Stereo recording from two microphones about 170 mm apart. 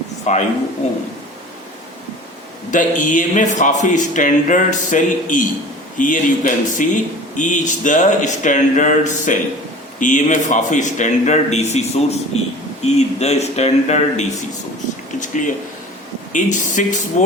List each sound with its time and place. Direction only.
0.3 s speech: 45° left (ahead or behind)
2.6 s speech: 50° left (ahead or behind)
16.3 s speech: 50° left (ahead or behind)